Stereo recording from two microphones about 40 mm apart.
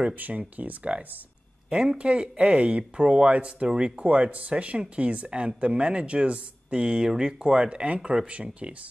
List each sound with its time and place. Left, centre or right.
0.6 s speech: right
2.0 s speech: right